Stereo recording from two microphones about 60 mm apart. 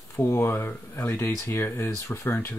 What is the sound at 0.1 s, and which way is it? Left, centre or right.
Speech, left.